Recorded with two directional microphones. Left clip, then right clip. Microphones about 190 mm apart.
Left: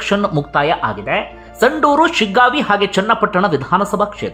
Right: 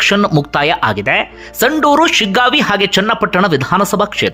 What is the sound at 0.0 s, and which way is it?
Speech, 20° right (ahead or behind).